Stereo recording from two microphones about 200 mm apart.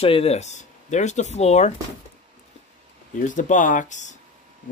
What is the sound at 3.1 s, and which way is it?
Speech, 40° left (ahead or behind).